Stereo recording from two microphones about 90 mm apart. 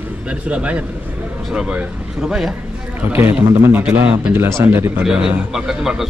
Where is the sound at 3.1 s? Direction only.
20° right (ahead or behind).